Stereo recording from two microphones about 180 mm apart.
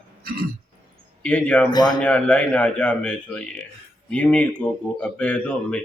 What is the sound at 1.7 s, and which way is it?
Speech, 20° left (ahead or behind).